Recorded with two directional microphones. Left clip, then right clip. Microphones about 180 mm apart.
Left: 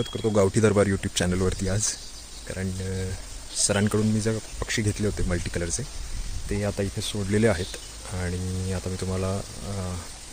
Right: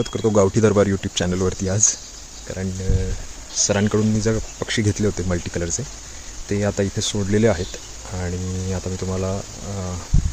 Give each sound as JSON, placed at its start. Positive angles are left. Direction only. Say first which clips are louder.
{"t": 0.3, "sound": "speech", "louder": "right 5 dB", "side_deg": 0}
{"t": 4.6, "sound": "speech", "louder": "right 5 dB", "side_deg": -15}
{"t": 6.5, "sound": "speech", "louder": "right 7 dB", "side_deg": -10}
{"t": 7.0, "sound": "speech", "louder": "right 7 dB", "side_deg": -25}
{"t": 7.3, "sound": "speech", "louder": "right 4 dB", "side_deg": 0}